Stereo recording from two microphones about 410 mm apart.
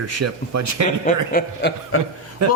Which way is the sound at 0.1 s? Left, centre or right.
Right.